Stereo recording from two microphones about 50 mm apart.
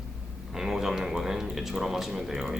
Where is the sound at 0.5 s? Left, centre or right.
Centre.